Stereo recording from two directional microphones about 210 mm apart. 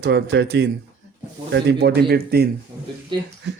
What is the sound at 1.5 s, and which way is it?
Speech, 55° right (ahead or behind).